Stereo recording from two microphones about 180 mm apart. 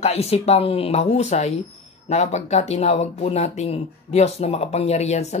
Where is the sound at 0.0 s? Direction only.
35° left (ahead or behind).